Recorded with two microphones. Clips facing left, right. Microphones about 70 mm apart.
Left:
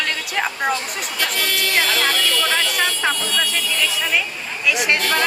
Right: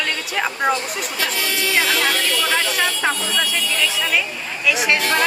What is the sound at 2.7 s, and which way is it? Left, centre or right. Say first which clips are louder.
Speech: even; centre.